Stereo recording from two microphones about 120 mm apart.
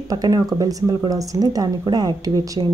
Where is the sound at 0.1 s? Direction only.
30° right (ahead or behind).